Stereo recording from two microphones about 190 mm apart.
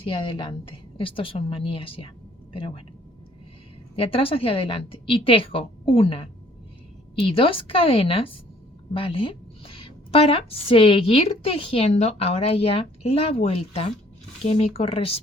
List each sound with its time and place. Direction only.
0.0 s a woman's voice: 25° left (ahead or behind)
3.9 s a woman's voice: 30° left (ahead or behind)